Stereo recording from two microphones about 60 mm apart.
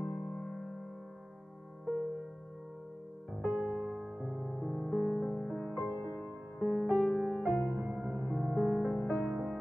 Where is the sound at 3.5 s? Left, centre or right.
Centre.